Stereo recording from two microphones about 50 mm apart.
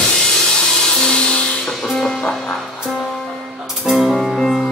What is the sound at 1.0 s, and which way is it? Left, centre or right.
Music, centre.